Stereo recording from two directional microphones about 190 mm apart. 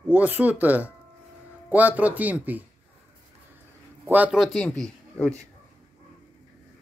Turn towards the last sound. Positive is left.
turn(degrees=5)  # may be behind; listen again after turning